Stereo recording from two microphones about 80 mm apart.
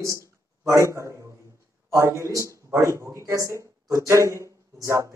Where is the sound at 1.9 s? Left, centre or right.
Right.